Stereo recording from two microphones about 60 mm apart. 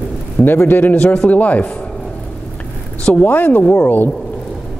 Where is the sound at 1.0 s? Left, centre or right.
Left.